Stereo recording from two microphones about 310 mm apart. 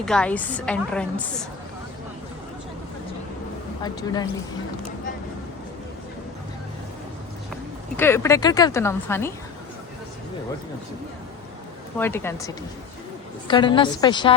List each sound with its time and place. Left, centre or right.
0.0 s a woman's voice: centre
3.8 s speech: centre
7.9 s speech: centre
11.9 s speech: centre